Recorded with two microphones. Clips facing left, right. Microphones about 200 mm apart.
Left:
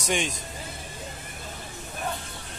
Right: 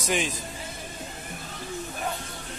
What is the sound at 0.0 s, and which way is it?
Speech, centre (ahead or behind).